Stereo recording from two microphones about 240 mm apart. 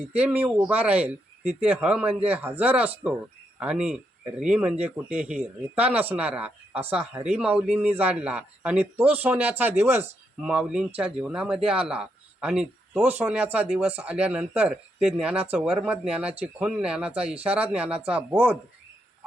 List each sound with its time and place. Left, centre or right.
0.2 s speech: centre
2.0 s a man's voice: right
2.3 s speech: centre